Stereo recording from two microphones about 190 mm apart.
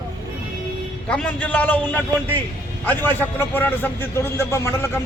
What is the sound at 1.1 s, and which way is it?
A man's voice, 5° left (ahead or behind).